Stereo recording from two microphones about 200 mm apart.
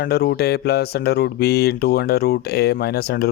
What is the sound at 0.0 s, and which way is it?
Speech, 50° left (ahead or behind).